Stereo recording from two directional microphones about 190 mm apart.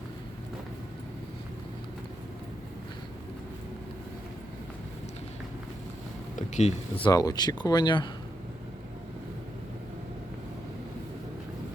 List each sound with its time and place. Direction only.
6.3 s speech: 40° left (ahead or behind)